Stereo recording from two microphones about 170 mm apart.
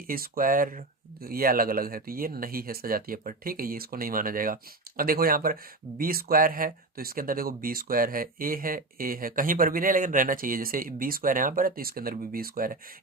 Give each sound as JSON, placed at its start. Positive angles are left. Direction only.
{"t": 0.1, "sound": "speech", "side_deg": -55}